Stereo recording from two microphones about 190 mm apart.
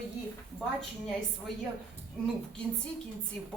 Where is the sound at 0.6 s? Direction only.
5° left (ahead or behind).